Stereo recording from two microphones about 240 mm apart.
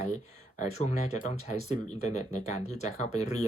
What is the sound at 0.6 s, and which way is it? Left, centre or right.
Speech, left.